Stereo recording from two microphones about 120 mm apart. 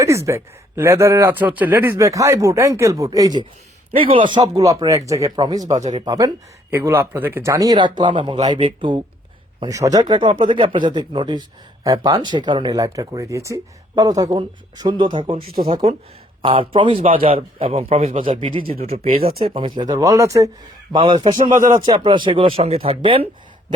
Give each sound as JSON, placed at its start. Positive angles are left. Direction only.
{"t": 0.0, "sound": "speech", "side_deg": -25}
{"t": 5.7, "sound": "speech", "side_deg": -75}
{"t": 6.1, "sound": "speech", "side_deg": -30}
{"t": 6.7, "sound": "a man's voice", "side_deg": -20}
{"t": 9.6, "sound": "a man's voice", "side_deg": -30}
{"t": 19.8, "sound": "speech", "side_deg": -30}
{"t": 20.9, "sound": "speech", "side_deg": -40}
{"t": 21.5, "sound": "speech", "side_deg": -90}
{"t": 21.8, "sound": "a man's voice", "side_deg": -40}